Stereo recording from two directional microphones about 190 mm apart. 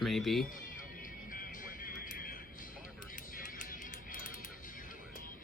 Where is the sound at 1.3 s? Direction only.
45° left (ahead or behind).